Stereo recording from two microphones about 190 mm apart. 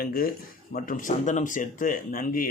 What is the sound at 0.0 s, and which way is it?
Speech, 50° left (ahead or behind).